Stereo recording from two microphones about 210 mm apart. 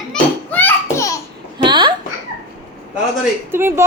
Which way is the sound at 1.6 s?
20° right (ahead or behind).